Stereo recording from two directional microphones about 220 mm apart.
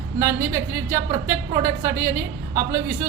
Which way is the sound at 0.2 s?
15° right (ahead or behind).